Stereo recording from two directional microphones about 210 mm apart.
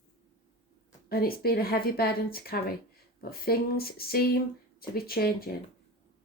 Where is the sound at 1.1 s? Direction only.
45° left (ahead or behind).